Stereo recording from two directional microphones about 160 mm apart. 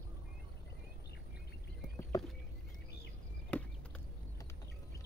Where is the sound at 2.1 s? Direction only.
20° left (ahead or behind).